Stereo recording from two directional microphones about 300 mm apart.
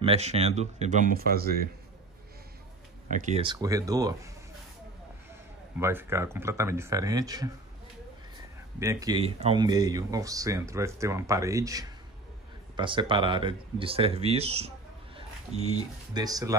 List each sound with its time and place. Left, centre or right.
0.0 s speech: right
3.1 s speech: right
5.8 s speech: centre
8.7 s speech: centre